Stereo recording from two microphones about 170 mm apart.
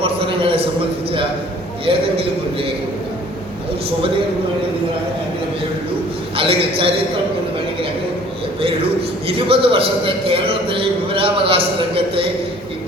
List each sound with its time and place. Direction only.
0.0 s a sound: 35° right (ahead or behind)
1.8 s a man's voice: 35° right (ahead or behind)
6.3 s a man's voice: 35° right (ahead or behind)
9.2 s a man's voice: 30° right (ahead or behind)